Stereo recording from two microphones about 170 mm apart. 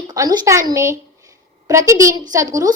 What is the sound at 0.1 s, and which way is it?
A woman's voice, 25° right (ahead or behind).